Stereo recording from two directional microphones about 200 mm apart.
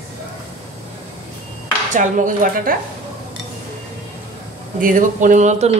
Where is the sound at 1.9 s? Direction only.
40° right (ahead or behind).